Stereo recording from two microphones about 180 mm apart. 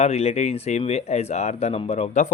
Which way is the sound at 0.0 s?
35° left (ahead or behind).